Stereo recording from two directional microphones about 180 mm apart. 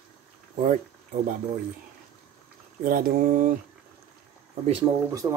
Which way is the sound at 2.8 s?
50° right (ahead or behind).